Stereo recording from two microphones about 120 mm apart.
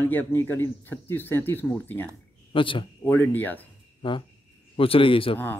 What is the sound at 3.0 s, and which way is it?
Speech, 15° left (ahead or behind).